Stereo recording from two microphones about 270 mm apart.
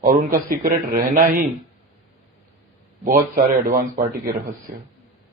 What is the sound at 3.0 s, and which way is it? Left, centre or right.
Speech, right.